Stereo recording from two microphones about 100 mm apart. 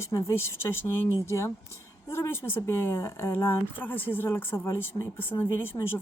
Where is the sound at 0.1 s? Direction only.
30° left (ahead or behind).